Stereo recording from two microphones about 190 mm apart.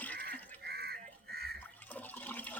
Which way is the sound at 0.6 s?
55° right (ahead or behind).